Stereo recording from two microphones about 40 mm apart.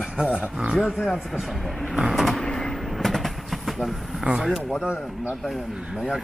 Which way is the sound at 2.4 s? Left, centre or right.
Centre.